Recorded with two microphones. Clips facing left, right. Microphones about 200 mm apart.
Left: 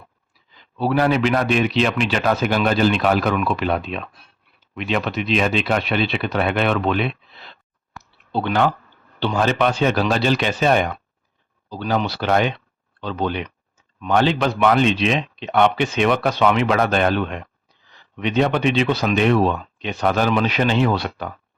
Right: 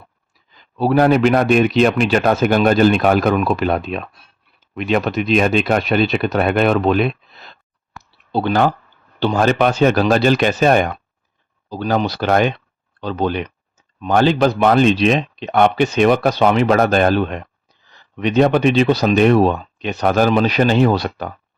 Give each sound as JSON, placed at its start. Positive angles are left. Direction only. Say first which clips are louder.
{"t": 0.5, "sound": "a man's voice", "louder": "right 4 dB", "side_deg": -45}